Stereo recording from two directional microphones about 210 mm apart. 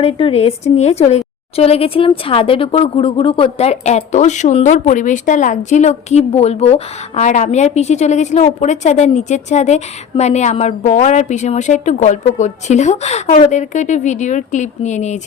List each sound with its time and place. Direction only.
0.0 s a woman's voice: 25° left (ahead or behind)